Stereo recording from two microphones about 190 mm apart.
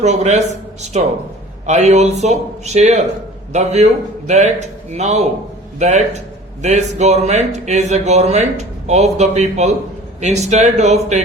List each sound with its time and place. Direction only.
0.0 s speech: 35° right (ahead or behind)